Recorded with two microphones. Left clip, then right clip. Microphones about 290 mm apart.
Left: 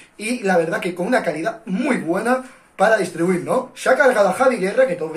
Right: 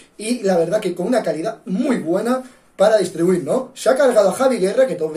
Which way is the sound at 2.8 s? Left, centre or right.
Centre.